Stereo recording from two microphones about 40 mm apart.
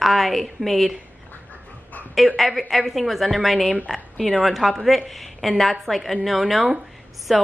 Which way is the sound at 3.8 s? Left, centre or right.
Centre.